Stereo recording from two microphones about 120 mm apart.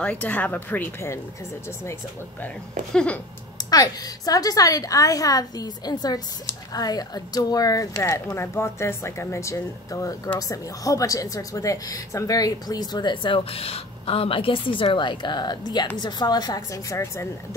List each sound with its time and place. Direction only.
0.0 s speech: 15° left (ahead or behind)
2.9 s speech: 5° left (ahead or behind)
3.7 s a woman's voice: 30° left (ahead or behind)